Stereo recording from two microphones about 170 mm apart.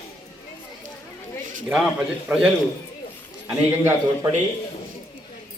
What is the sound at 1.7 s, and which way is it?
Speech, centre (ahead or behind).